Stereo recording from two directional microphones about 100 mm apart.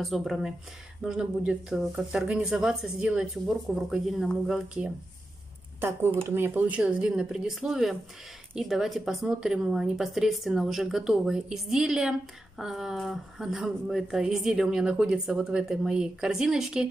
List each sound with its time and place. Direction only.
0.0 s speech: centre (ahead or behind)
5.8 s speech: 25° right (ahead or behind); by 16.8 s 5° right (ahead or behind)